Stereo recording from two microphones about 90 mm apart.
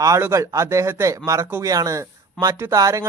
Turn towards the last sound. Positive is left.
turn(degrees=-35)  # may be behind; listen again after turning